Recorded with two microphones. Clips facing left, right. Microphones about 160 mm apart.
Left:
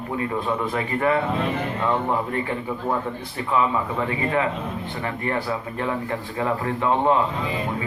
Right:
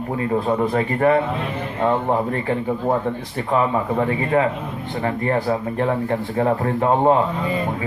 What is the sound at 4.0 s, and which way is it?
Speech, 35° right (ahead or behind).